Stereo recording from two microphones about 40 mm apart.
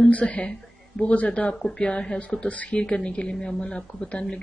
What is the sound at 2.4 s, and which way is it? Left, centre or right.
Speech, left.